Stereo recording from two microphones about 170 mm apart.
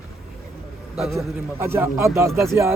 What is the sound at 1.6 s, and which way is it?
Speech, 15° right (ahead or behind).